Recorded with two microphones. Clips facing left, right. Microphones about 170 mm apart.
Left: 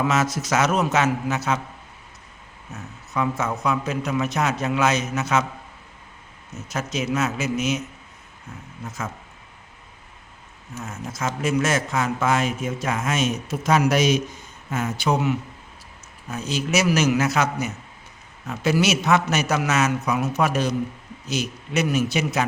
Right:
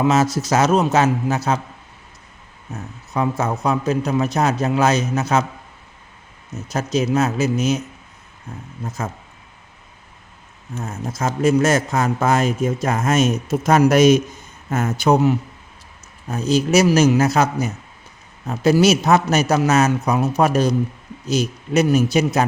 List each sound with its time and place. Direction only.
0.0 s a man's voice: 30° right (ahead or behind)
2.7 s a man's voice: 35° right (ahead or behind)
6.7 s a man's voice: 35° right (ahead or behind)
10.8 s a man's voice: 35° right (ahead or behind)